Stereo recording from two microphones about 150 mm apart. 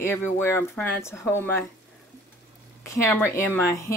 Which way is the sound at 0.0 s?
15° left (ahead or behind).